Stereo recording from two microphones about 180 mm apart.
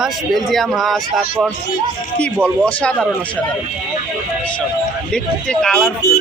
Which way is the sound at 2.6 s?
5° left (ahead or behind).